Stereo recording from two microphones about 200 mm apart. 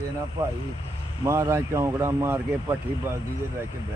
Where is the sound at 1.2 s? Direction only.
15° right (ahead or behind).